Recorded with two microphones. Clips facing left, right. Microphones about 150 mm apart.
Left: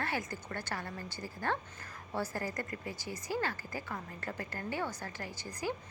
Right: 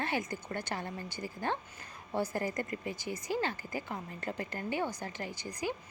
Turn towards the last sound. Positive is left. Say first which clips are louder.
# right 1 dB
turn(degrees=-20)  # may be behind; listen again after turning